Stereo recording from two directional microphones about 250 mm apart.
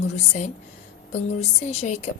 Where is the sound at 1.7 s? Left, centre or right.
Left.